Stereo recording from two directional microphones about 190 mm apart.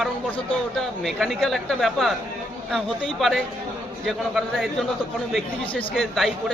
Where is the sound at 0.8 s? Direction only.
Centre (ahead or behind).